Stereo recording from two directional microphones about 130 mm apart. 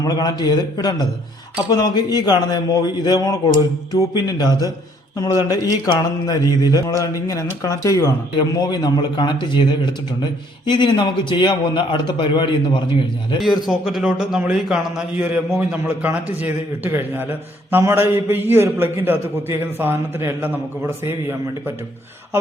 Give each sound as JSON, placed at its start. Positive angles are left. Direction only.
{"t": 0.0, "sound": "a man's voice", "side_deg": 30}
{"t": 13.7, "sound": "a man's voice", "side_deg": -5}